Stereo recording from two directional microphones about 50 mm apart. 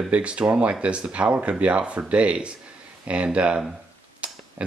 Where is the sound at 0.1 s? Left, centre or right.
Right.